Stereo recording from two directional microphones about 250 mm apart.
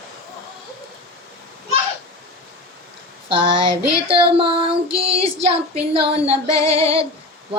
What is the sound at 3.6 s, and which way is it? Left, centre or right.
Child singing, right.